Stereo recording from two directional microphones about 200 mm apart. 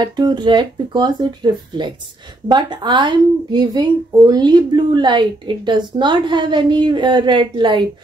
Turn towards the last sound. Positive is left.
turn(degrees=-25)  # may be behind; listen again after turning